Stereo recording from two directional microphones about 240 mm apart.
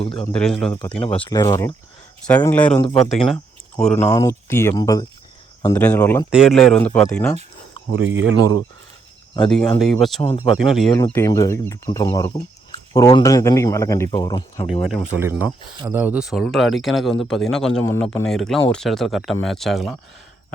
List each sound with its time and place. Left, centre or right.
0.0 s speech: left
0.3 s speech: centre
0.7 s speech: centre
3.3 s a sound: centre
4.1 s speech: centre
7.9 s speech: right
9.6 s speech: centre
10.9 s speech: centre
14.7 s speech: centre